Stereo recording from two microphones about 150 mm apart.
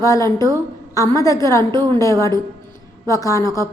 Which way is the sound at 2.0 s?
20° left (ahead or behind).